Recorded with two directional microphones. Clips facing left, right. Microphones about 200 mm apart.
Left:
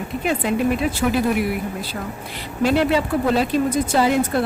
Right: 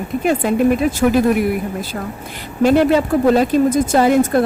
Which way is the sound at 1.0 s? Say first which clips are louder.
Right 6 dB; 50° right (ahead or behind).